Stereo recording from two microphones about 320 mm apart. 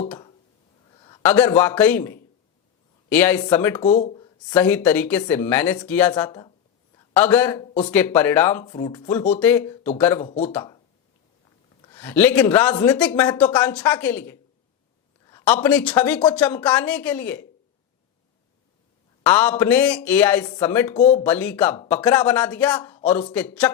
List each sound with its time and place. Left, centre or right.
0.9 s a man's voice: centre
3.8 s speech: left
4.5 s a man's voice: centre
10.5 s speech: centre
11.8 s a man's voice: centre
19.2 s speech: centre
21.2 s speech: centre